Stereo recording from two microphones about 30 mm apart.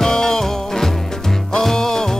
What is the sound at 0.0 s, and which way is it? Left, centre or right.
Music, centre.